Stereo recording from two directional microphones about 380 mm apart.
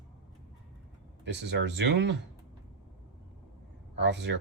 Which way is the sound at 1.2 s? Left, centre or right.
Right.